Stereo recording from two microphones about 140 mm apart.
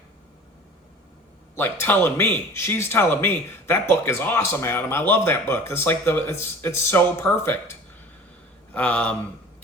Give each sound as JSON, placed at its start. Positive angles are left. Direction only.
{"t": 1.5, "sound": "speech", "side_deg": 15}
{"t": 8.7, "sound": "speech", "side_deg": 10}